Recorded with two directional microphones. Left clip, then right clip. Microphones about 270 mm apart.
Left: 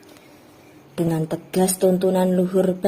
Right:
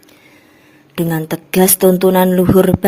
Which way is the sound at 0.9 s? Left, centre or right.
Right.